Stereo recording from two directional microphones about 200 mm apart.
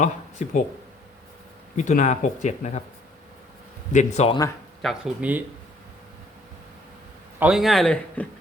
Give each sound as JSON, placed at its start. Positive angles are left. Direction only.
{"t": 0.0, "sound": "speech", "side_deg": 35}
{"t": 1.7, "sound": "speech", "side_deg": 35}
{"t": 3.9, "sound": "speech", "side_deg": 35}
{"t": 4.8, "sound": "a man's voice", "side_deg": 0}
{"t": 7.3, "sound": "a man's voice", "side_deg": -5}